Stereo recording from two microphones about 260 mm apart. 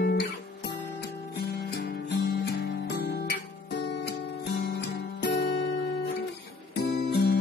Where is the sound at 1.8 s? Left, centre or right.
Left.